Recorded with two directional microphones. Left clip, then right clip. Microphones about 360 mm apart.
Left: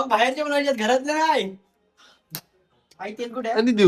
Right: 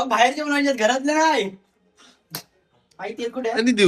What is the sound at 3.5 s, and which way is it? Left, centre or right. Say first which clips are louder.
Speech: even; centre.